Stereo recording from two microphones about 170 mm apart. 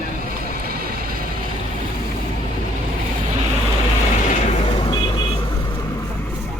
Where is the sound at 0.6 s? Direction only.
60° right (ahead or behind).